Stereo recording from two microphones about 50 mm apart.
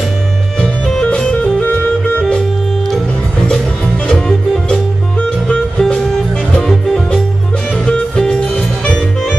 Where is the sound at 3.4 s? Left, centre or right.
Centre.